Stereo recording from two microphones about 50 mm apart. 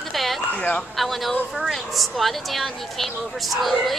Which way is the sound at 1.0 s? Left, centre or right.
Centre.